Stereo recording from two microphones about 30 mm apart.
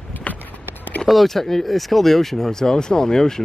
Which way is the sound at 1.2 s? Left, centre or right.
Centre.